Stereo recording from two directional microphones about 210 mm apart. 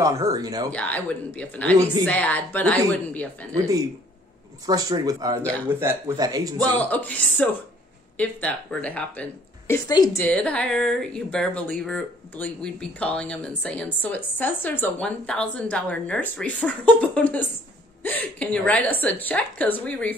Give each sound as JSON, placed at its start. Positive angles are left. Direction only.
{"t": 0.0, "sound": "a man's voice", "side_deg": -15}
{"t": 0.7, "sound": "speech", "side_deg": 5}
{"t": 3.5, "sound": "a man's voice", "side_deg": -15}
{"t": 6.7, "sound": "speech", "side_deg": 5}
{"t": 9.8, "sound": "speech", "side_deg": 20}
{"t": 10.2, "sound": "a woman's voice", "side_deg": 5}